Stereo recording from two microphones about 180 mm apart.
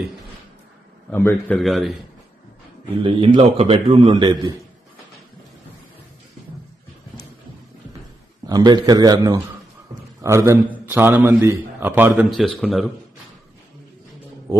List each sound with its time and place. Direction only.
1.1 s a man's voice: 15° left (ahead or behind)
3.0 s a man's voice: 30° right (ahead or behind)
8.4 s a man's voice: 20° right (ahead or behind); by 12.9 s centre (ahead or behind)